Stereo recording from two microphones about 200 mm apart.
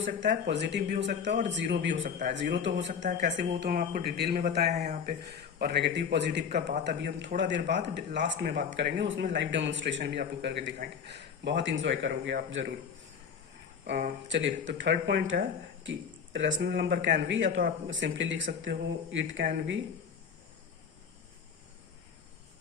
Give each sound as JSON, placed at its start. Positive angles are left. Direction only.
{"t": 0.4, "sound": "speech", "side_deg": -60}
{"t": 3.1, "sound": "speech", "side_deg": -40}
{"t": 3.3, "sound": "speech", "side_deg": -55}
{"t": 14.3, "sound": "speech", "side_deg": -65}